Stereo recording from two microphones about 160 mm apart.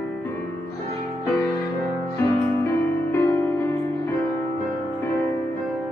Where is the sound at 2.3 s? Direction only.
15° left (ahead or behind).